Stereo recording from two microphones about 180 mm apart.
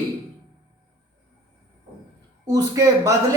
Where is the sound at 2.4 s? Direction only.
20° right (ahead or behind).